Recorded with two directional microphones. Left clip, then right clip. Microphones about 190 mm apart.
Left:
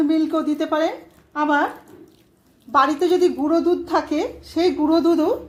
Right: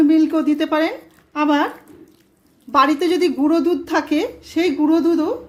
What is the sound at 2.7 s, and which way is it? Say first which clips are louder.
A woman's voice: right 1 dB; 25° right (ahead or behind).